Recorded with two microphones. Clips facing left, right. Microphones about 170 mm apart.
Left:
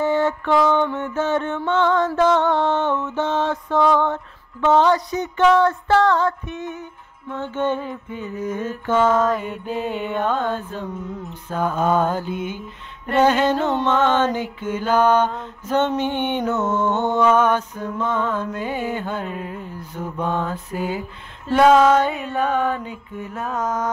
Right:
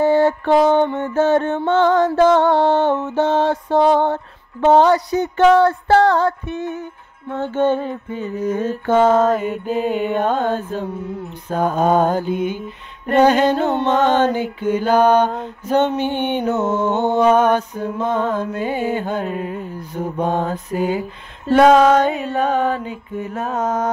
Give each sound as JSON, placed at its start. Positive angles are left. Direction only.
{"t": 0.0, "sound": "mantra", "side_deg": -35}
{"t": 9.5, "sound": "mantra", "side_deg": -5}
{"t": 9.9, "sound": "music", "side_deg": -40}
{"t": 11.5, "sound": "mantra", "side_deg": -40}
{"t": 12.1, "sound": "mantra", "side_deg": -15}
{"t": 13.8, "sound": "mantra", "side_deg": -40}
{"t": 14.6, "sound": "mantra", "side_deg": -15}
{"t": 18.1, "sound": "mantra", "side_deg": -40}
{"t": 18.4, "sound": "mantra", "side_deg": -15}
{"t": 19.3, "sound": "music", "side_deg": -20}
{"t": 20.0, "sound": "mantra", "side_deg": -40}
{"t": 20.5, "sound": "mantra", "side_deg": -15}
{"t": 21.5, "sound": "mantra", "side_deg": -40}
{"t": 23.5, "sound": "music", "side_deg": -30}